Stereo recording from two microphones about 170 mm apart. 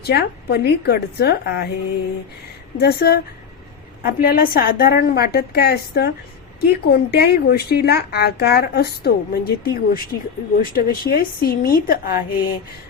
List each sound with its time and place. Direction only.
0.0 s speech: 70° left (ahead or behind)
2.7 s a woman's voice: 70° left (ahead or behind)